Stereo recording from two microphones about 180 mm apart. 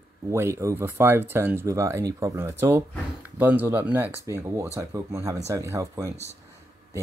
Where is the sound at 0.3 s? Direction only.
15° right (ahead or behind).